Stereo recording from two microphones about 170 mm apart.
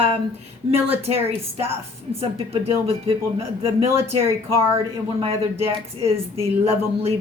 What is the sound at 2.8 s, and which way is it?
Speech, 35° right (ahead or behind).